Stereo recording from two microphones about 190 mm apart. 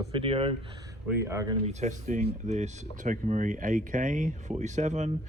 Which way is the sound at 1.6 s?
40° right (ahead or behind).